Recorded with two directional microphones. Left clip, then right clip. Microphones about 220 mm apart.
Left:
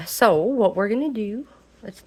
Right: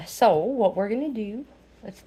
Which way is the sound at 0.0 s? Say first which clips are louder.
Left 2 dB; 25° left (ahead or behind).